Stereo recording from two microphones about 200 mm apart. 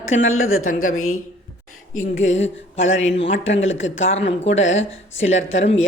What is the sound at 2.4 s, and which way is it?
Speech, 70° left (ahead or behind).